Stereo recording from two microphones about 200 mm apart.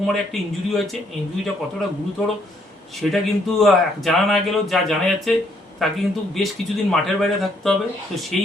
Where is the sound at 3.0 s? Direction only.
Centre (ahead or behind).